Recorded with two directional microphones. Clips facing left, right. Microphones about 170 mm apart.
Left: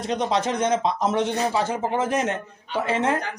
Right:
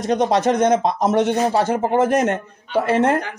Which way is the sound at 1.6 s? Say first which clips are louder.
Right 6 dB; 55° right (ahead or behind).